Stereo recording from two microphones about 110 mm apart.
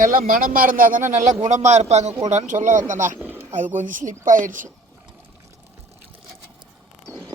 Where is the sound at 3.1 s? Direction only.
20° right (ahead or behind).